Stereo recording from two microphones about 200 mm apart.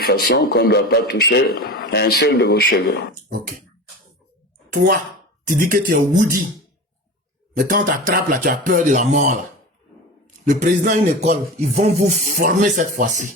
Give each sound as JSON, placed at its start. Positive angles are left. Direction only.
{"t": 0.0, "sound": "a man's voice", "side_deg": 50}
{"t": 3.2, "sound": "speech", "side_deg": -45}
{"t": 5.5, "sound": "speech", "side_deg": -45}
{"t": 7.5, "sound": "a man's voice", "side_deg": -45}